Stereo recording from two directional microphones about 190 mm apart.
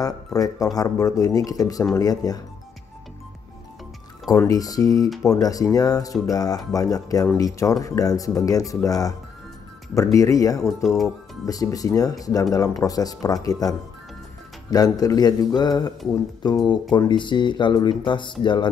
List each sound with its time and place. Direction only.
0.0 s speech: 20° left (ahead or behind)
4.3 s speech: 20° left (ahead or behind)
10.1 s speech: 15° left (ahead or behind)
10.8 s speech: centre (ahead or behind)
11.4 s speech: 20° left (ahead or behind)